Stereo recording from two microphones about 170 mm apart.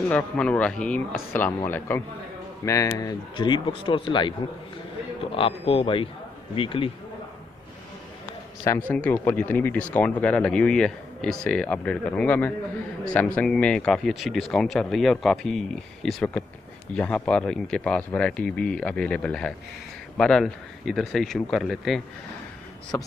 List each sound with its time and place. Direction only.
0.1 s speech: 5° left (ahead or behind); by 6.9 s 30° left (ahead or behind)
8.6 s speech: 15° left (ahead or behind)
22.9 s speech: 15° left (ahead or behind)